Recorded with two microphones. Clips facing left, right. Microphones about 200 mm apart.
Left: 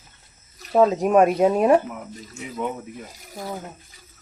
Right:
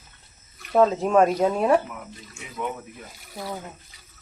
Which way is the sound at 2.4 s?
40° left (ahead or behind).